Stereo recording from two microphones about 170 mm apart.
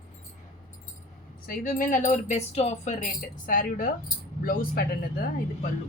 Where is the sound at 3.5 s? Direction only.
55° left (ahead or behind).